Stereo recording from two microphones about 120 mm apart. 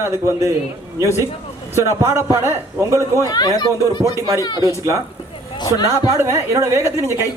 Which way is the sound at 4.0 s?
25° right (ahead or behind).